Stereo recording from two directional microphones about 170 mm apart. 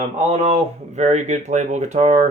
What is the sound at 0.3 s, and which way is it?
Speech, 40° right (ahead or behind).